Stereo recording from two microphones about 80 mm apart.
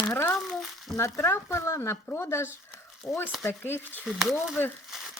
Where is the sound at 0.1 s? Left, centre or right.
Left.